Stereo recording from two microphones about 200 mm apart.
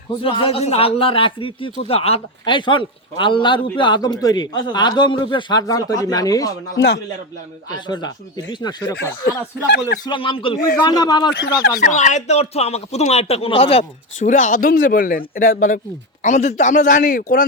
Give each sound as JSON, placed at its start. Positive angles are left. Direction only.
{"t": 0.2, "sound": "speech", "side_deg": 25}
{"t": 6.7, "sound": "speech", "side_deg": 55}
{"t": 7.9, "sound": "speech", "side_deg": 20}
{"t": 9.6, "sound": "speech", "side_deg": 55}
{"t": 10.0, "sound": "speech", "side_deg": 25}
{"t": 11.8, "sound": "a man's voice", "side_deg": 35}
{"t": 14.3, "sound": "a man's voice", "side_deg": 40}